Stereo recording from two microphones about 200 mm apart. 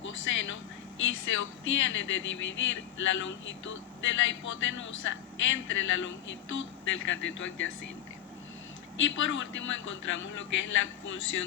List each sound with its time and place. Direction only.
0.1 s speech: 70° left (ahead or behind)
9.0 s speech: 70° left (ahead or behind)